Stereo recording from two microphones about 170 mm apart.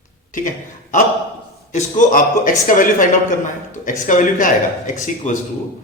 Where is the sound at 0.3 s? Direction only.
50° left (ahead or behind).